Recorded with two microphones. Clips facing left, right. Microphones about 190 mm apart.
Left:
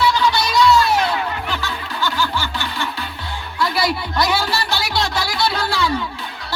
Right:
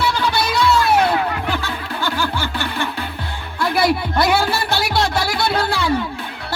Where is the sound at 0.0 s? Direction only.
55° right (ahead or behind).